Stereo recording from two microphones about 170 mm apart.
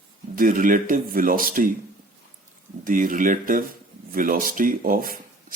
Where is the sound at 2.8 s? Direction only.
50° right (ahead or behind).